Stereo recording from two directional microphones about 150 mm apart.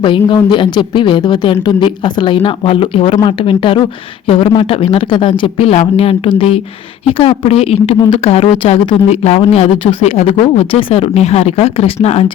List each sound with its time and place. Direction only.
0.0 s a woman's voice: 30° left (ahead or behind)